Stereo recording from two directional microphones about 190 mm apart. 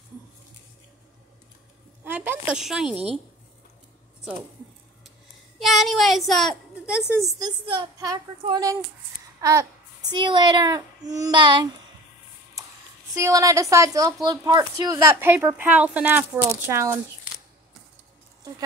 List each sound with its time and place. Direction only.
2.0 s a woman's voice: 10° right (ahead or behind)
5.6 s a woman's voice: centre (ahead or behind)
7.2 s female singing: 20° right (ahead or behind)
9.4 s a child's voice: 15° right (ahead or behind)
10.1 s female singing: 25° right (ahead or behind)
13.1 s speech: 15° right (ahead or behind)